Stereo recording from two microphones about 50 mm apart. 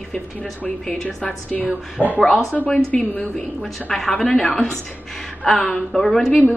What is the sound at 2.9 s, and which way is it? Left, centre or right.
A woman's voice, centre.